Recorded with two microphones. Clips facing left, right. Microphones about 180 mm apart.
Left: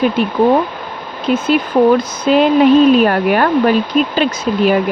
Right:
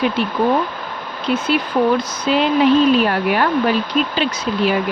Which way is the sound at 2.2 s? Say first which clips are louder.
Left 5 dB; 50° left (ahead or behind).